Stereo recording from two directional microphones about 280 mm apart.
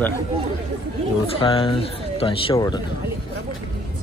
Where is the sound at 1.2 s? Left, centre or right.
Centre.